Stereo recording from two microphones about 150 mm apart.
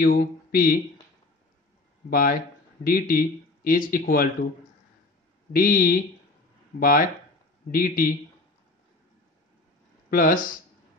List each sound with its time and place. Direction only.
0.0 s speech: 85° left
2.0 s speech: 75° left (ahead or behind)
5.5 s speech: 75° left (ahead or behind)
10.0 s speech: 65° left (ahead or behind)